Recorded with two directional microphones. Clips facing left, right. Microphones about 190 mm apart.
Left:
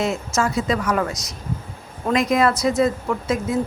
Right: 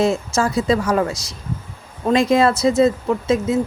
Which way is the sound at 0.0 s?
30° right (ahead or behind).